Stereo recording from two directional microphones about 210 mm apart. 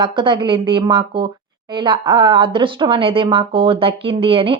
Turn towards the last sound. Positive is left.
turn(degrees=-25)  # may be behind; listen again after turning